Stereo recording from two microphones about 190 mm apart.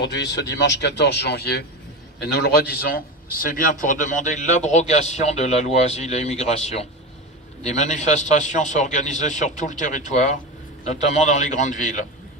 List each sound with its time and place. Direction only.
0.0 s a man's voice: 70° left (ahead or behind); by 11.9 s 40° left (ahead or behind)